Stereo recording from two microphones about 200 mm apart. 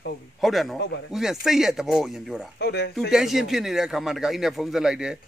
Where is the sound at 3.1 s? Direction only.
Centre (ahead or behind).